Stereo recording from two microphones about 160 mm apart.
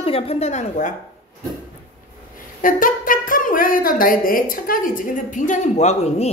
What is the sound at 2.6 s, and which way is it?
Speech, 60° left (ahead or behind).